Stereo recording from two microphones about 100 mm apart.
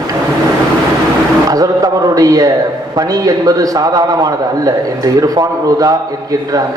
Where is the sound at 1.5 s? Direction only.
40° right (ahead or behind).